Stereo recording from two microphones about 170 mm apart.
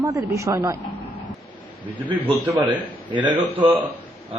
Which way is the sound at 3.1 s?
25° right (ahead or behind).